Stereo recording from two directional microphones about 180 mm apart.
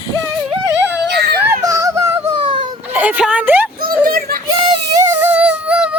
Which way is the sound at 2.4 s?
30° right (ahead or behind).